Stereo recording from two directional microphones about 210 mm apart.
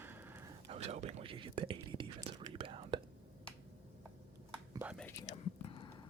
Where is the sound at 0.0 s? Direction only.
10° right (ahead or behind).